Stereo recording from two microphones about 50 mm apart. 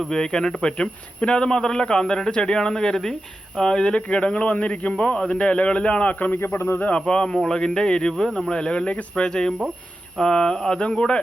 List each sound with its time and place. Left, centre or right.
0.1 s a man's voice: centre; by 6.4 s left
6.4 s a man's voice: left
7.0 s a man's voice: centre